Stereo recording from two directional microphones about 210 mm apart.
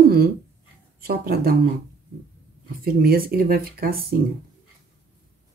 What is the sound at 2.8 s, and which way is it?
Speech, 45° right (ahead or behind).